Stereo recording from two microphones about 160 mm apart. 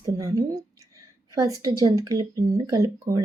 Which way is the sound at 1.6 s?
25° right (ahead or behind).